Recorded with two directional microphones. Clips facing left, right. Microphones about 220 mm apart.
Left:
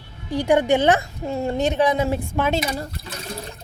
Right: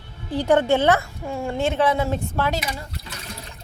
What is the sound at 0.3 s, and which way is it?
A woman's voice, 15° left (ahead or behind).